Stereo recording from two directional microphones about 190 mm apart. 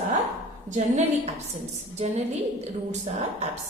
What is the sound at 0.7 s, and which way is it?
Speech, 40° right (ahead or behind).